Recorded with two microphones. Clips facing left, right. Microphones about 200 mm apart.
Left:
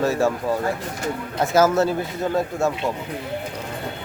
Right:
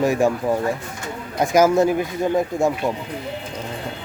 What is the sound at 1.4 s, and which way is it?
Speech, 15° right (ahead or behind).